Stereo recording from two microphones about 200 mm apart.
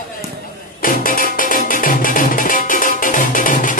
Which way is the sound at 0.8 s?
45° left (ahead or behind).